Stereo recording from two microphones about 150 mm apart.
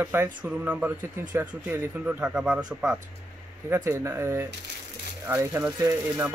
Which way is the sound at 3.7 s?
20° right (ahead or behind).